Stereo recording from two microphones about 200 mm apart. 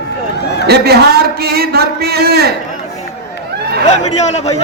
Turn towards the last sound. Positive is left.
turn(degrees=35)  # may be behind; listen again after turning